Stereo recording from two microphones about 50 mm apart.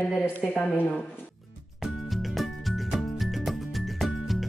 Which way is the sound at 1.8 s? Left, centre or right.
Centre.